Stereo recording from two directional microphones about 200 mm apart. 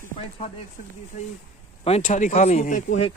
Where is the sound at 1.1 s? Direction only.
35° left (ahead or behind).